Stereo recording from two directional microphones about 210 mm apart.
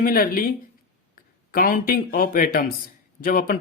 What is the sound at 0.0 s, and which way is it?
Speech, 45° left (ahead or behind).